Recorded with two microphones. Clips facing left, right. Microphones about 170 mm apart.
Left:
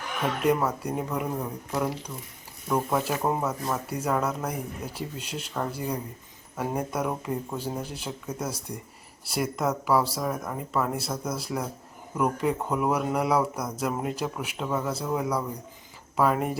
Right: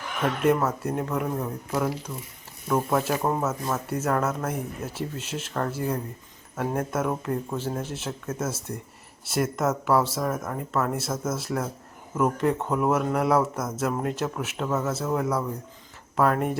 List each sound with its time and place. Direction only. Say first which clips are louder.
0.7 s speech: right 2 dB; 5° right (ahead or behind)